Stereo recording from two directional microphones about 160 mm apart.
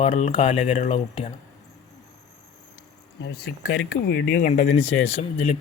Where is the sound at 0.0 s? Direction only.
40° left (ahead or behind).